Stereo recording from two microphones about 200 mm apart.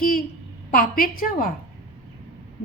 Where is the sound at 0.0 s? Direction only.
45° left (ahead or behind).